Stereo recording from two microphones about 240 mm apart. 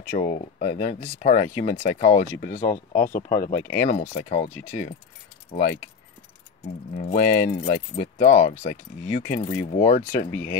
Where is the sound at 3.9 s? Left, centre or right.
Left.